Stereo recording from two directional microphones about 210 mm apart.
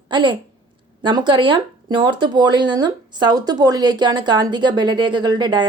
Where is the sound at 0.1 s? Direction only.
20° right (ahead or behind).